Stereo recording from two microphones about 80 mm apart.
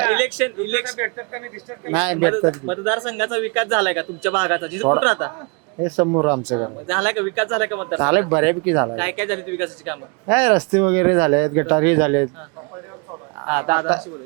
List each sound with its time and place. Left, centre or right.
0.0 s speech: centre
13.4 s speech: centre